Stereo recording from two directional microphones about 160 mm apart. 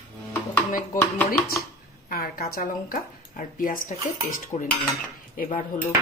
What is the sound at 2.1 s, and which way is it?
Speech, 70° left (ahead or behind).